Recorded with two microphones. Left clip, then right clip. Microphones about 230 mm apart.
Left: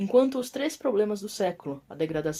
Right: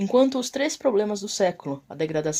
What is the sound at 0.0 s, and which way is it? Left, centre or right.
Speech, right.